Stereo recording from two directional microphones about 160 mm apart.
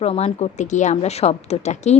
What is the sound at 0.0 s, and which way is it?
A woman's voice, 40° left (ahead or behind).